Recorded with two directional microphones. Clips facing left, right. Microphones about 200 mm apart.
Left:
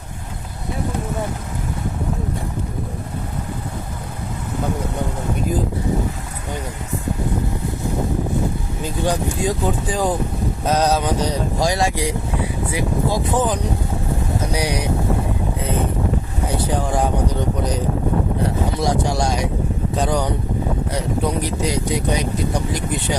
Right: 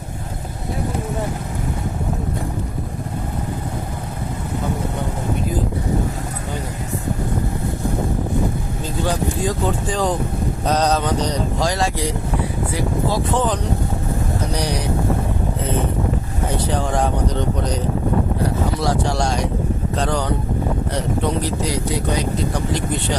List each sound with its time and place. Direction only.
9.0 s speech: 15° left (ahead or behind)
10.7 s a sound: 5° left (ahead or behind)
11.6 s speech: 10° left (ahead or behind)
18.4 s a sound: 15° left (ahead or behind)
20.0 s speech: 15° left (ahead or behind)
21.4 s speech: 15° left (ahead or behind)